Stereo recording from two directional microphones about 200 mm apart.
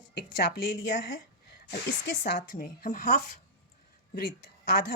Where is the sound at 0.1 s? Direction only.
55° left (ahead or behind).